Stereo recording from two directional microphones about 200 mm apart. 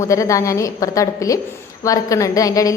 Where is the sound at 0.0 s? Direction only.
15° left (ahead or behind).